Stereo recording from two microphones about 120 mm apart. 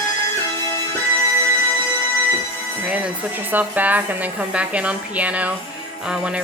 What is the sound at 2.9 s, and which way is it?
Music, 10° right (ahead or behind).